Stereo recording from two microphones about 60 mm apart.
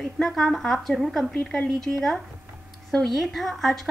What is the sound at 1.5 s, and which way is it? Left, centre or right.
A woman's voice, centre.